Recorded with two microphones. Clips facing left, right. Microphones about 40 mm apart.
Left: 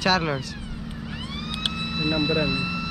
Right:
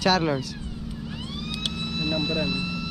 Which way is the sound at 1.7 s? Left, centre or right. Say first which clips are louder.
Left 3 dB; centre.